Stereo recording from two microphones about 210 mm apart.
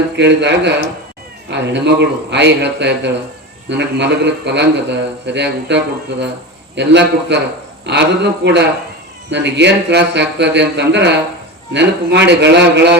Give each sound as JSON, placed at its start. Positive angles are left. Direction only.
{"t": 0.2, "sound": "a man's voice", "side_deg": -55}